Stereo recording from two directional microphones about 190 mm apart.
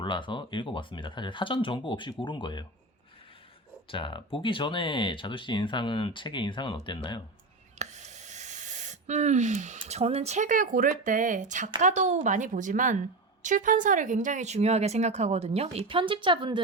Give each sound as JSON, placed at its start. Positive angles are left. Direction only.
{"t": 0.0, "sound": "speech", "side_deg": 25}
{"t": 3.8, "sound": "speech", "side_deg": 25}
{"t": 7.8, "sound": "speech", "side_deg": -40}